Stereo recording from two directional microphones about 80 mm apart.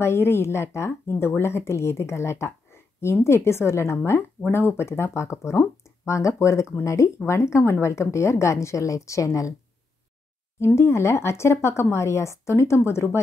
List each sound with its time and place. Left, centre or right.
0.0 s speech: left
10.6 s speech: left